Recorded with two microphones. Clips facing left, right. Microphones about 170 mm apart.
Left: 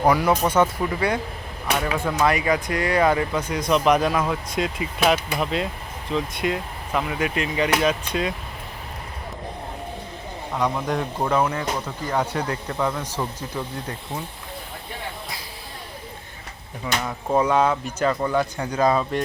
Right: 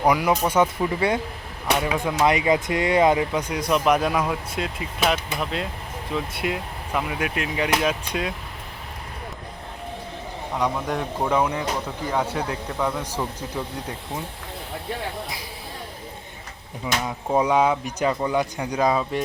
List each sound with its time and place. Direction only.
0.1 s speech: 10° right (ahead or behind)
0.9 s speech: 25° right (ahead or behind); by 8.3 s 5° right (ahead or behind)
10.6 s speech: 5° right (ahead or behind)
16.8 s speech: 15° right (ahead or behind)